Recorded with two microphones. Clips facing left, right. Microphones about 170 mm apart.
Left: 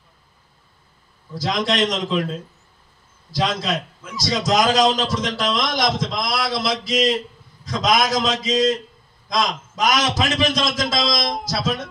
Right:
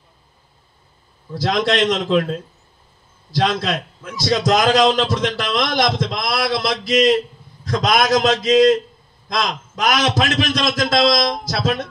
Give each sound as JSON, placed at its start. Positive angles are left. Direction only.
{"t": 1.4, "sound": "a man's voice", "side_deg": -65}
{"t": 3.3, "sound": "a man's voice", "side_deg": -65}